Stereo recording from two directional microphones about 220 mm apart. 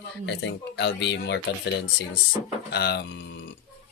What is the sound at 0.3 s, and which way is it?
Speech, 55° left (ahead or behind).